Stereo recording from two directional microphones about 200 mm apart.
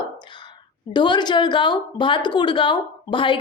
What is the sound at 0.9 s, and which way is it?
A woman's voice, 20° left (ahead or behind).